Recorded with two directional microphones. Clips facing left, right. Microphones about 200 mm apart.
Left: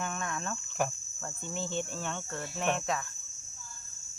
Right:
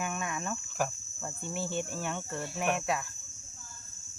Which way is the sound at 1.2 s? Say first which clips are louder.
Right 1 dB; 10° right (ahead or behind).